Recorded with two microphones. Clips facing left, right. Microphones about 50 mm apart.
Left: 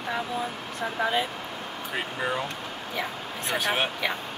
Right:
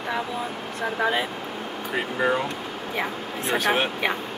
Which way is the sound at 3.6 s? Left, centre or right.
Centre.